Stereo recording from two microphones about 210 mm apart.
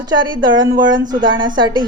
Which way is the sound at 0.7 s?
40° right (ahead or behind).